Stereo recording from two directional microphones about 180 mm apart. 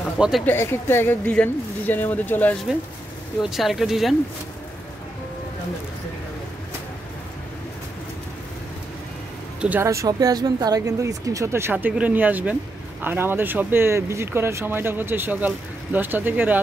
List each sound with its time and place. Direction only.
0.5 s speech: 15° left (ahead or behind)
3.4 s speech: centre (ahead or behind)
9.6 s speech: 10° right (ahead or behind)